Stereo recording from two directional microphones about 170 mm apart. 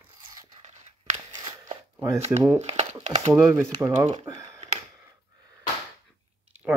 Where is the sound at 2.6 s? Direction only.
40° right (ahead or behind).